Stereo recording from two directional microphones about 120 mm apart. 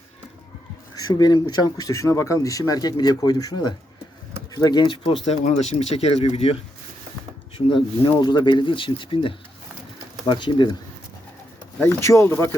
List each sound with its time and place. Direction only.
1.0 s speech: 35° left (ahead or behind)
5.2 s speech: 75° left (ahead or behind)
7.7 s speech: 40° left (ahead or behind)
11.8 s speech: 25° left (ahead or behind)